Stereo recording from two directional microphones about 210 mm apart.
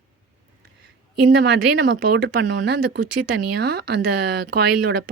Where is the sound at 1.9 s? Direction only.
55° right (ahead or behind).